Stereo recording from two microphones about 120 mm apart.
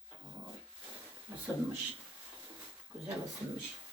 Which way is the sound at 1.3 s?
20° right (ahead or behind).